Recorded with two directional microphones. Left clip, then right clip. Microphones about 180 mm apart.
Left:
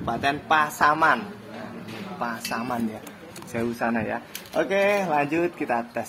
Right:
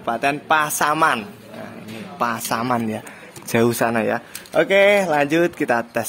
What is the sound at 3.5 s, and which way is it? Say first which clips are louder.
Speech: right 8 dB; 85° right.